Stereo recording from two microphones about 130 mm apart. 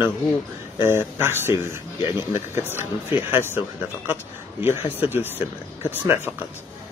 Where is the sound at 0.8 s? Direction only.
20° right (ahead or behind).